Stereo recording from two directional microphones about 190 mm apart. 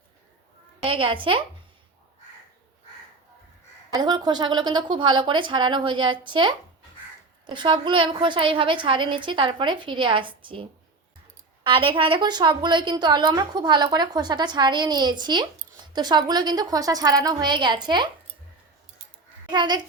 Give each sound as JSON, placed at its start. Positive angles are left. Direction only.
{"t": 0.8, "sound": "a woman's voice", "side_deg": -30}
{"t": 3.9, "sound": "a woman's voice", "side_deg": -20}
{"t": 19.5, "sound": "a woman's voice", "side_deg": -25}